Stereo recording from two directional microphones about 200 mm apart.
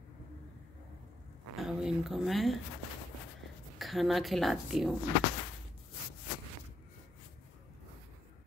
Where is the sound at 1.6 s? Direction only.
5° right (ahead or behind).